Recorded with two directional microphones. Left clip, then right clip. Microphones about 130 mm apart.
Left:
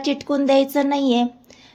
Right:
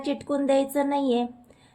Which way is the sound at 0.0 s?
35° left (ahead or behind).